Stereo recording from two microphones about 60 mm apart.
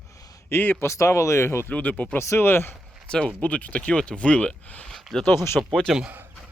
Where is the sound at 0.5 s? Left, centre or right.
Left.